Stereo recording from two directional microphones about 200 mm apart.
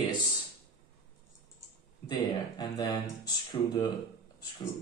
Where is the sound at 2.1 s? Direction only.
20° left (ahead or behind).